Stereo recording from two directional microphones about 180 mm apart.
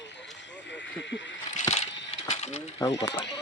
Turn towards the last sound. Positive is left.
turn(degrees=20)  # may be behind; listen again after turning